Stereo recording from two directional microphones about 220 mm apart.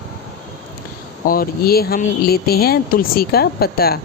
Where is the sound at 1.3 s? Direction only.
45° left (ahead or behind).